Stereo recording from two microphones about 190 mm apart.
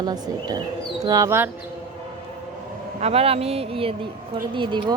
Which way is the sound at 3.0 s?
30° right (ahead or behind).